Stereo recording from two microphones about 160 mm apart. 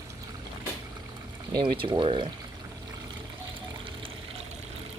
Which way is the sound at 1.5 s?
30° right (ahead or behind).